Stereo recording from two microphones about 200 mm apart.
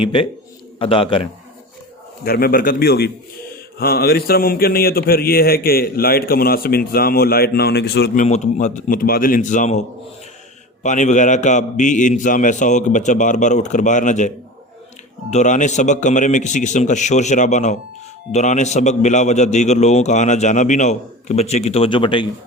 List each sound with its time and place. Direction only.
0.0 s a man's voice: 25° left (ahead or behind)
2.2 s speech: 50° left (ahead or behind)
10.8 s a man's voice: 35° left (ahead or behind)